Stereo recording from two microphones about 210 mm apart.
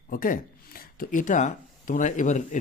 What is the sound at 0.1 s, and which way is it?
A man's voice, 40° left (ahead or behind).